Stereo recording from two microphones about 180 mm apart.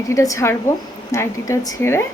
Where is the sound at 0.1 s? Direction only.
20° left (ahead or behind).